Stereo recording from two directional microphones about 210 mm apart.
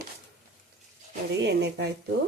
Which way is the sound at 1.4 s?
55° right (ahead or behind).